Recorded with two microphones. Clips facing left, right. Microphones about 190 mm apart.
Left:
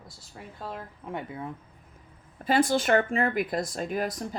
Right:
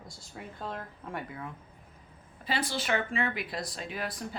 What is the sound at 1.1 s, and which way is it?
Speech, 25° left (ahead or behind).